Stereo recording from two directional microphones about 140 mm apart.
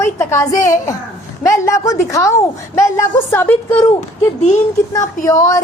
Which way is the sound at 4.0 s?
55° left (ahead or behind).